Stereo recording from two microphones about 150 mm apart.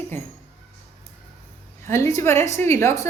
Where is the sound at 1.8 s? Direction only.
20° left (ahead or behind).